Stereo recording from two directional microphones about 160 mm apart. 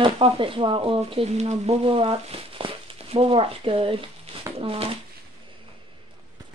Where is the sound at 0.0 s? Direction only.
35° right (ahead or behind).